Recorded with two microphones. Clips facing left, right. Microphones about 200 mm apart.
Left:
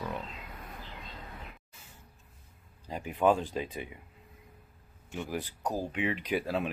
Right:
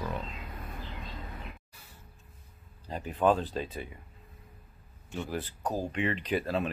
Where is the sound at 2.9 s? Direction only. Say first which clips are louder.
Even; 10° left (ahead or behind).